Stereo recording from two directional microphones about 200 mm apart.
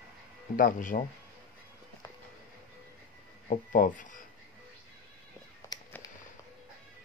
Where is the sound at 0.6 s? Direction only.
45° left (ahead or behind).